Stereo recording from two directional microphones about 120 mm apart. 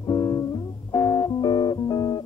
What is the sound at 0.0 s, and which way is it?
Music, 30° left (ahead or behind).